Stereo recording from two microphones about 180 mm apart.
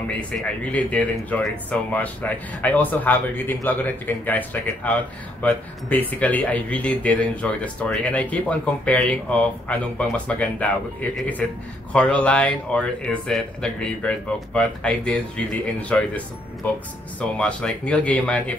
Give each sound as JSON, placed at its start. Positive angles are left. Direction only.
{"t": 0.4, "sound": "speech", "side_deg": 10}